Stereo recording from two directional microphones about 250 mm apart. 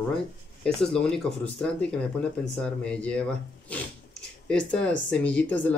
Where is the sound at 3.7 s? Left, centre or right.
Centre.